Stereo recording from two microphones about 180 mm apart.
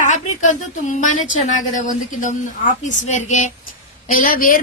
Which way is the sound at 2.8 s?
40° left (ahead or behind).